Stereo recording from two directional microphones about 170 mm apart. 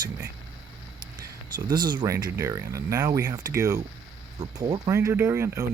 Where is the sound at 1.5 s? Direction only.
25° right (ahead or behind).